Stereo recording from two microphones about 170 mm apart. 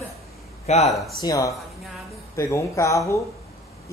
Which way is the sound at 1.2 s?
20° left (ahead or behind).